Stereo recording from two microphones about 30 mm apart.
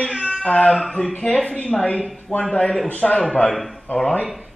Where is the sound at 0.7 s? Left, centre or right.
Centre.